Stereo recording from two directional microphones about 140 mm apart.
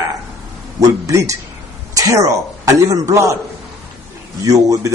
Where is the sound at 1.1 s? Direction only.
20° right (ahead or behind).